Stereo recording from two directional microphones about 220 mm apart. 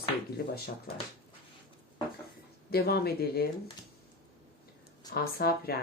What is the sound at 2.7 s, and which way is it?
Speech, 45° left (ahead or behind).